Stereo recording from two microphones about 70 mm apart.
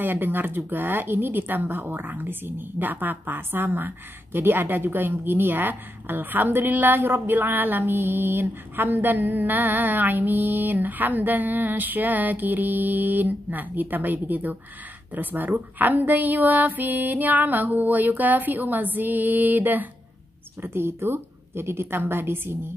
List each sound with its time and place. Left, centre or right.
0.0 s a woman's voice: right